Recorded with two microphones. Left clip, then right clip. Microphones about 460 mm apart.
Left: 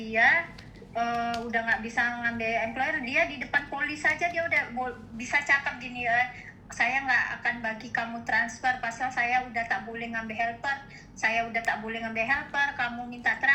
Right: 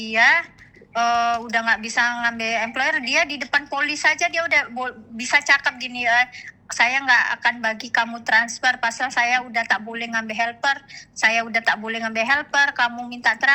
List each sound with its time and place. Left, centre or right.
0.0 s a woman's voice: right